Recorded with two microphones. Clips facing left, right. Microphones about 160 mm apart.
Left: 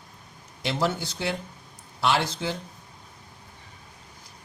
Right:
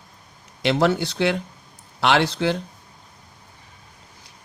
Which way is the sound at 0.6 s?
70° right (ahead or behind).